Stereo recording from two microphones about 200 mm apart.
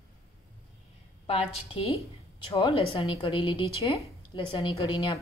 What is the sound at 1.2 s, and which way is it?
A woman's voice, 30° left (ahead or behind).